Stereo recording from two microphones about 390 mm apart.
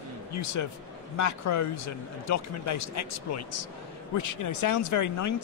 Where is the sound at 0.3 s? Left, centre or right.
Left.